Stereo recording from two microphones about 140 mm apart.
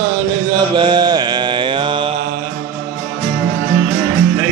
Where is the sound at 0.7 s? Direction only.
35° right (ahead or behind).